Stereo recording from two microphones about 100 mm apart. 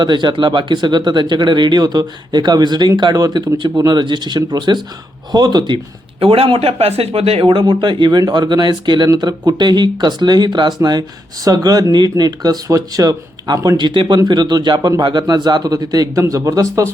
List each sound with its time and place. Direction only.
0.0 s speech: 50° right (ahead or behind)
13.7 s speech: 50° right (ahead or behind); by 16.9 s 30° right (ahead or behind)